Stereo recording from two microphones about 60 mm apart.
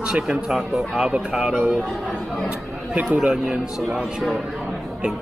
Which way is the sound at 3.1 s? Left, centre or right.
Centre.